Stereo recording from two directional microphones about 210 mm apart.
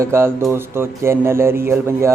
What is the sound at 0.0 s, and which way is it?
Speech, 10° right (ahead or behind).